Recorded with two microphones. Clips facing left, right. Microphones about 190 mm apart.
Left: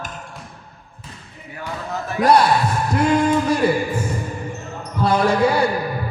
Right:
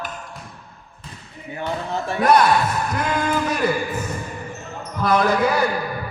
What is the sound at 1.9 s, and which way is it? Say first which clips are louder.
Speech: even; 30° right (ahead or behind).